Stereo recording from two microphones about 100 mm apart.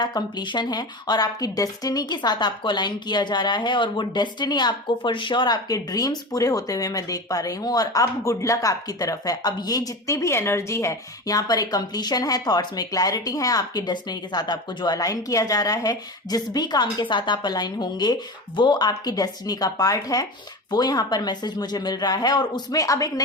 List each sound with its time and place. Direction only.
0.0 s speech: 45° left (ahead or behind)